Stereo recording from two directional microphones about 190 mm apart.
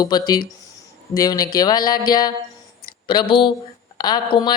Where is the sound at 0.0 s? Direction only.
20° left (ahead or behind).